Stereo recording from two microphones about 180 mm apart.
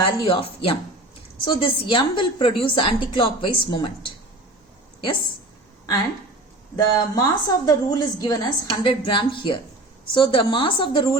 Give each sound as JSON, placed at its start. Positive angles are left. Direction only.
{"t": 0.0, "sound": "a woman's voice", "side_deg": 30}
{"t": 6.7, "sound": "a woman's voice", "side_deg": 20}